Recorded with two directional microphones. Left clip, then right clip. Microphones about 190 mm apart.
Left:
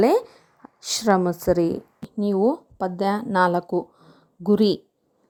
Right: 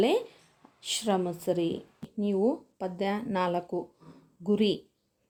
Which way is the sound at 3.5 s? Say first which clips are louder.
Left 8 dB; 35° left (ahead or behind).